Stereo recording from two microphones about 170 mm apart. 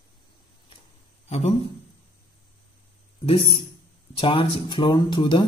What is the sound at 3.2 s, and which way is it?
Speech, 35° left (ahead or behind).